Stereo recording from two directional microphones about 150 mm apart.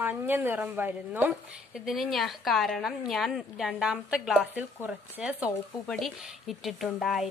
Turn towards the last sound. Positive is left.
turn(degrees=0)  # may be behind; listen again after turning